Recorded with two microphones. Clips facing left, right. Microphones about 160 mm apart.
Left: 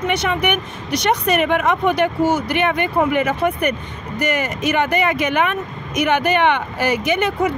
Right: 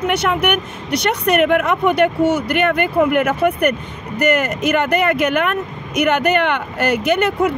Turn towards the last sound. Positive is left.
turn(degrees=-60)  # may be behind; listen again after turning